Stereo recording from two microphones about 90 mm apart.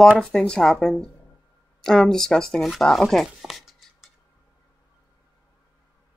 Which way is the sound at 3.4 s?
5° right (ahead or behind).